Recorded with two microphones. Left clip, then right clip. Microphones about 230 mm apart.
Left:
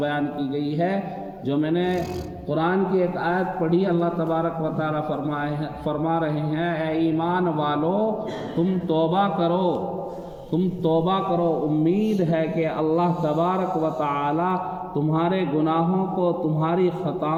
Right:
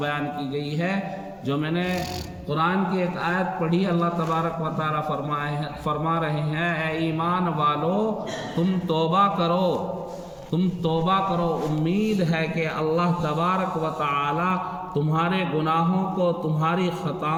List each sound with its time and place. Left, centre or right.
0.0 s a man's voice: right
12.2 s a man's voice: right